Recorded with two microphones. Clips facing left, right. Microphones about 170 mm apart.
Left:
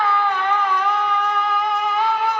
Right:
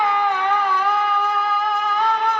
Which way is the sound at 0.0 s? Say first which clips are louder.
Right 1 dB; 15° right (ahead or behind).